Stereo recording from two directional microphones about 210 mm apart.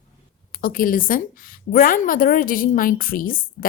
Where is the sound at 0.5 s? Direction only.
40° left (ahead or behind).